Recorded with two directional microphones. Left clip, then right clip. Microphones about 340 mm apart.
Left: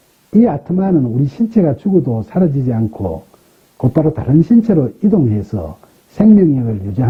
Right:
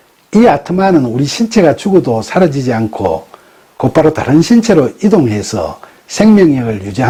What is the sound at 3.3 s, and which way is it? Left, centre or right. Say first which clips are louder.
Speech: right 12 dB; centre.